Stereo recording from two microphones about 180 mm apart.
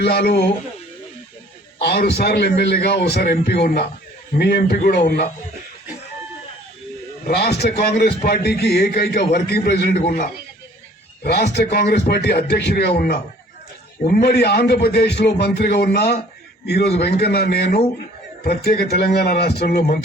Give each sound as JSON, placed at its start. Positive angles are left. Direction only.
{"t": 0.0, "sound": "a man's voice", "side_deg": 60}
{"t": 1.8, "sound": "a man's voice", "side_deg": 60}
{"t": 7.3, "sound": "a man's voice", "side_deg": 60}
{"t": 11.2, "sound": "a man's voice", "side_deg": 65}
{"t": 14.0, "sound": "a man's voice", "side_deg": 55}